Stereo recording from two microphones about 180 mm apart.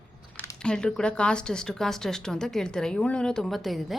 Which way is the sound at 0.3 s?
5° left (ahead or behind).